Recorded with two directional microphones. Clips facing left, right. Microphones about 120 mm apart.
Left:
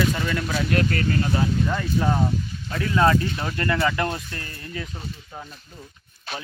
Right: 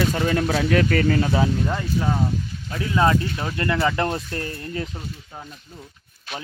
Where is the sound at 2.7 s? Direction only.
15° right (ahead or behind).